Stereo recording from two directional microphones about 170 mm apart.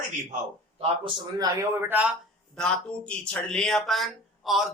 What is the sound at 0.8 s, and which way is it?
Speech, 30° right (ahead or behind).